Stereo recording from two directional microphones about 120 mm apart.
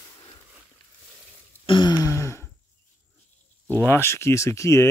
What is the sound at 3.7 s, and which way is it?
Speech, 20° left (ahead or behind).